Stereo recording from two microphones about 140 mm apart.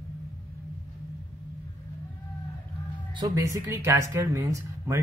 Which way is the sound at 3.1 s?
25° right (ahead or behind).